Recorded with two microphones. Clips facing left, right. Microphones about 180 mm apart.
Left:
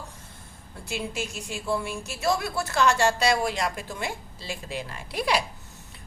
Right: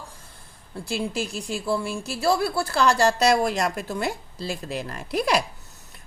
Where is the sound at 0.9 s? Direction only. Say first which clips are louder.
Right 4 dB; 35° right (ahead or behind).